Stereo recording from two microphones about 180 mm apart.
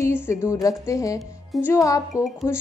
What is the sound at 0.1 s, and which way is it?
A woman's voice, 15° left (ahead or behind).